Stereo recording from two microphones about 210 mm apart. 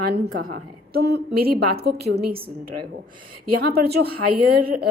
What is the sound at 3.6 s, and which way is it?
Speech, 50° right (ahead or behind).